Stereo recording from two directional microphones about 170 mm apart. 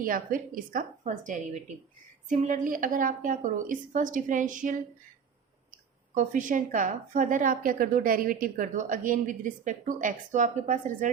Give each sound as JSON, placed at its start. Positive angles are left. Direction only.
{"t": 0.0, "sound": "a woman's voice", "side_deg": -55}
{"t": 6.1, "sound": "a woman's voice", "side_deg": -50}